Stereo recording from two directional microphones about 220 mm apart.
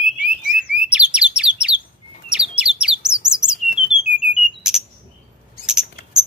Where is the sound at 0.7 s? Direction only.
5° right (ahead or behind).